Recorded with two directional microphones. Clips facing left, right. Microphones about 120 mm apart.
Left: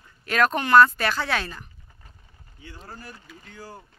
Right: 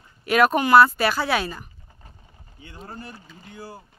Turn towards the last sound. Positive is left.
turn(degrees=-10)  # may be behind; listen again after turning